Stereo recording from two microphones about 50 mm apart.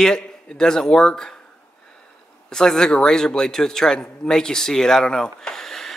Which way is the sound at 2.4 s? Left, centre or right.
Centre.